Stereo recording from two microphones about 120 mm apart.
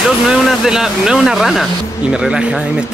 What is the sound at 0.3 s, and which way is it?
Speech, 5° right (ahead or behind).